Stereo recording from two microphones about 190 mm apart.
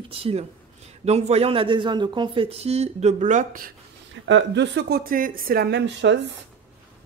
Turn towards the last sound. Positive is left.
turn(degrees=-65)  # may be behind; listen again after turning